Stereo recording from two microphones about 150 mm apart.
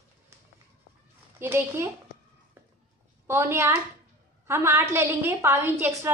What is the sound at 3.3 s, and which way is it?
A woman's voice, 15° right (ahead or behind).